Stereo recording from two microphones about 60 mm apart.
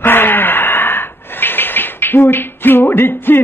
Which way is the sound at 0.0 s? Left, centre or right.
Left.